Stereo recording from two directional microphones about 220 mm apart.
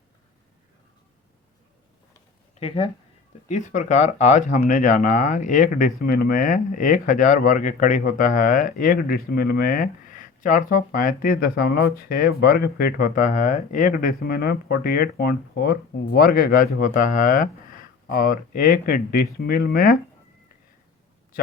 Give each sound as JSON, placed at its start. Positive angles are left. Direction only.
{"t": 2.6, "sound": "speech", "side_deg": 25}